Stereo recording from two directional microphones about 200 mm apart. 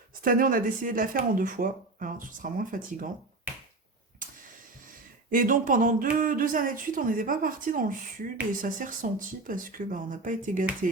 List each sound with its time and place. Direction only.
0.2 s speech: 45° right (ahead or behind)
5.3 s speech: 45° right (ahead or behind)